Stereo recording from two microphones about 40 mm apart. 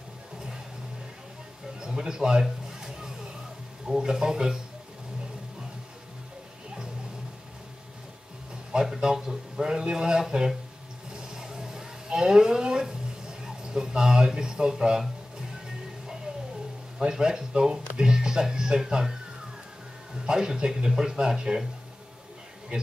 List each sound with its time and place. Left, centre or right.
1.8 s a man's voice: centre
2.4 s a sound: centre
3.8 s speech: centre
8.7 s speech: centre
11.1 s a sound: centre
17.0 s speech: centre
20.2 s speech: centre